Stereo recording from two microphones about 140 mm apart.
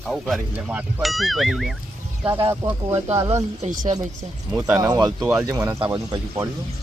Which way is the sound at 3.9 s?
60° right (ahead or behind).